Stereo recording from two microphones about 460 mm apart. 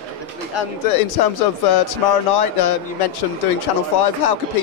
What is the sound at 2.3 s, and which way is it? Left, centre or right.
Speech, left.